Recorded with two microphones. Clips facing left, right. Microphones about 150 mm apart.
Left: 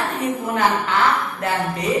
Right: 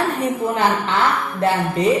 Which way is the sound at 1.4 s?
30° right (ahead or behind).